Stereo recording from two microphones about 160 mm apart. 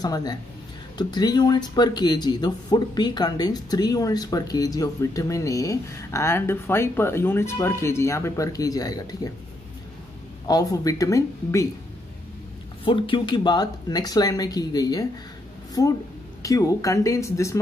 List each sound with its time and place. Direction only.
0.0 s speech: 25° left (ahead or behind)
10.4 s speech: 20° left (ahead or behind)
12.8 s speech: 30° left (ahead or behind)